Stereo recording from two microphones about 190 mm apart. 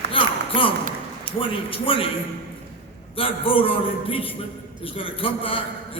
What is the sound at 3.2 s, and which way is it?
A man's voice, 30° left (ahead or behind).